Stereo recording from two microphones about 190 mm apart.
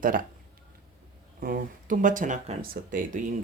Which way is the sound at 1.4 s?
45° right (ahead or behind).